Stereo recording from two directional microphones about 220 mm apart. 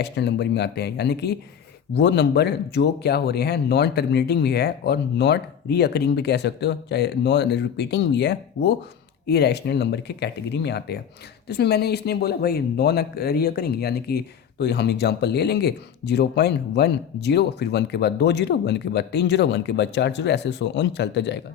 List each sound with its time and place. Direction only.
0.0 s speech: 50° left (ahead or behind)